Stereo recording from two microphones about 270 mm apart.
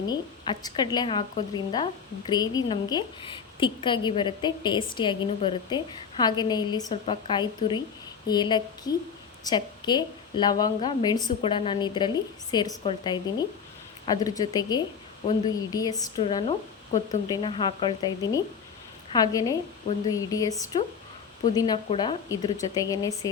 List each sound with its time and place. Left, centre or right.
0.1 s a woman's voice: centre